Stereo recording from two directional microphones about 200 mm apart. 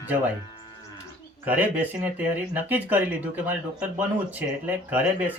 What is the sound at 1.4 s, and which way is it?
Speech, 10° right (ahead or behind).